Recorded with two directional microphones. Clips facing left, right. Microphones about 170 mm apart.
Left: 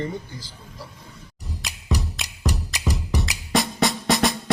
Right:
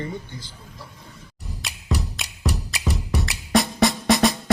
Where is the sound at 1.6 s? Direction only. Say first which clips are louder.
Even; centre (ahead or behind).